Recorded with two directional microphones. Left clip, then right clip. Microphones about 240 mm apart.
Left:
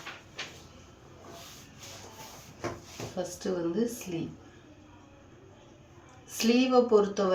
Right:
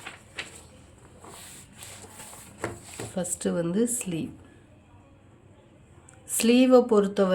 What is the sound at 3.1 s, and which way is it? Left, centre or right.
Speech, right.